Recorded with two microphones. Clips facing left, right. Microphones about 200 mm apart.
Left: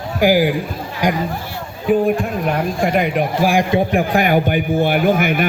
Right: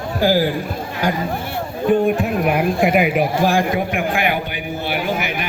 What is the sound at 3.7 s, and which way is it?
A man's voice, 35° left (ahead or behind).